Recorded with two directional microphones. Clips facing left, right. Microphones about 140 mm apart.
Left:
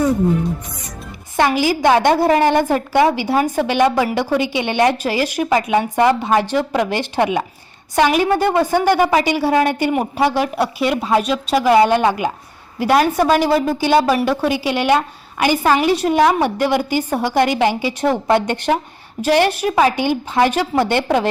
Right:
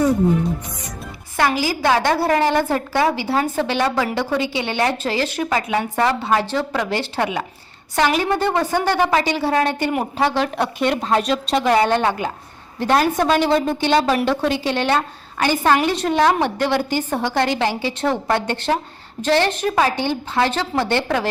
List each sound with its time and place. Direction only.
1.4 s a woman's voice: 20° left (ahead or behind)